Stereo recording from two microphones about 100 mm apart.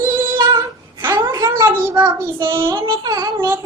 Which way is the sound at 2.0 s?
25° right (ahead or behind).